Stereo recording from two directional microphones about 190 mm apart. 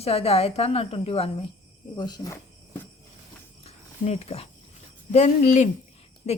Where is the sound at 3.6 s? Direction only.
35° left (ahead or behind).